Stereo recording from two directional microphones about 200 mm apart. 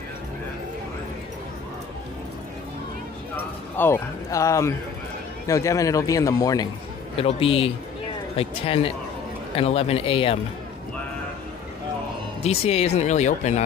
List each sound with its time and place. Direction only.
3.8 s a man's voice: 10° left (ahead or behind)
7.2 s speech: 30° left (ahead or behind)
12.4 s speech: 30° left (ahead or behind)